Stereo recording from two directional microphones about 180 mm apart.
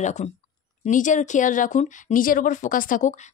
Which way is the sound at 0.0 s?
40° left (ahead or behind).